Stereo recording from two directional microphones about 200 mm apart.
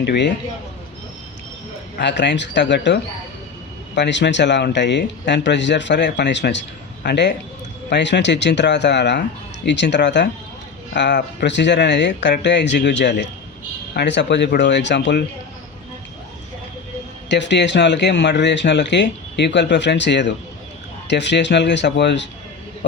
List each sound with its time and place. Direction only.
0.0 s speech: 60° left (ahead or behind)
2.0 s speech: 60° left (ahead or behind)
17.2 s speech: 60° left (ahead or behind)